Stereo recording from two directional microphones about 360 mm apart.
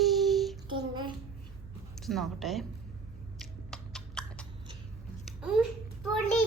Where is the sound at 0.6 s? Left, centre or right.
Centre.